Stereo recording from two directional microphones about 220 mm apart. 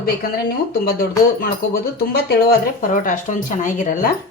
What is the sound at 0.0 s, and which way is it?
Speech, 40° left (ahead or behind).